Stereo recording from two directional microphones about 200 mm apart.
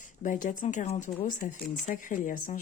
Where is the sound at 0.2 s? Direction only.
40° left (ahead or behind).